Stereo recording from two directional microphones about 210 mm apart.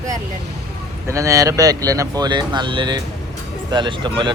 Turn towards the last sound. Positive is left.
turn(degrees=-20)  # may be behind; listen again after turning